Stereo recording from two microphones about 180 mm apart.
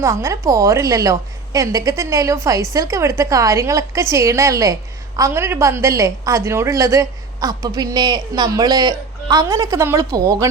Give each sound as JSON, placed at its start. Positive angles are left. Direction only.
{"t": 0.0, "sound": "a woman's voice", "side_deg": -15}